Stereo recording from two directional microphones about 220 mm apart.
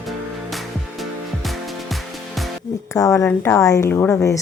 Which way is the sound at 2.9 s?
15° left (ahead or behind).